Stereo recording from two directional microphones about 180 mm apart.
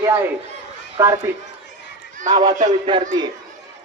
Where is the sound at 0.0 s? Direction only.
10° right (ahead or behind).